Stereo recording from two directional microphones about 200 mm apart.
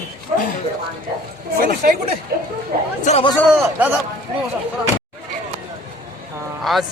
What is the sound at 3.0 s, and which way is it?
Speech, 35° left (ahead or behind).